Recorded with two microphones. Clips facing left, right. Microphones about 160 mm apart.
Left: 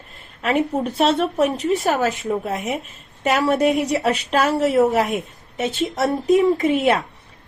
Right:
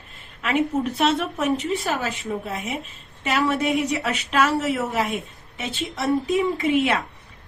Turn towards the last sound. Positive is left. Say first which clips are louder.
# left 4 dB
turn(degrees=40)  # may be behind; listen again after turning